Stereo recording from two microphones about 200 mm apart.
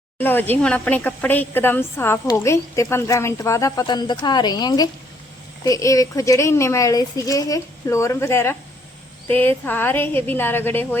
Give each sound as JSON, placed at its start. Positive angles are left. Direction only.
{"t": 0.2, "sound": "speech", "side_deg": 10}